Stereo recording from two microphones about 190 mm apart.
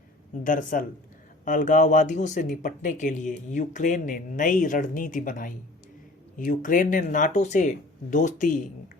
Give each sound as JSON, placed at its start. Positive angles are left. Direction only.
{"t": 0.4, "sound": "speech", "side_deg": 45}